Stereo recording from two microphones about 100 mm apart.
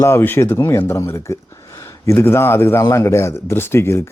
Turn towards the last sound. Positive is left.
turn(degrees=25)  # may be behind; listen again after turning